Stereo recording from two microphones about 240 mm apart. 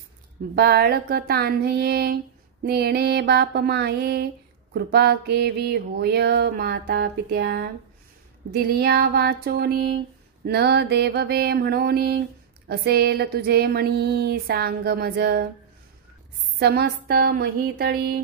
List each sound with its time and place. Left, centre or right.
0.6 s mantra: right
2.6 s a sound: right
4.7 s mantra: right
8.7 s mantra: right
16.5 s mantra: right